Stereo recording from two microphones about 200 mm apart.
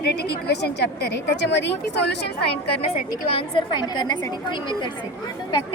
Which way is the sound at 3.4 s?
25° left (ahead or behind).